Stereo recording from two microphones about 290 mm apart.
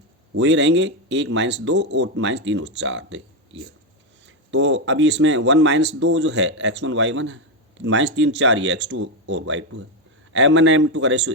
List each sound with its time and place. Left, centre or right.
0.3 s speech: right